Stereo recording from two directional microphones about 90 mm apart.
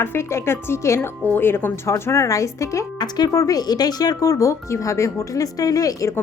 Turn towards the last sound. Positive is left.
turn(degrees=40)  # may be behind; listen again after turning